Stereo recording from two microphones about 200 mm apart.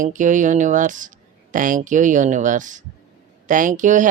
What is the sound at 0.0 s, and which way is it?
Speech, 40° right (ahead or behind).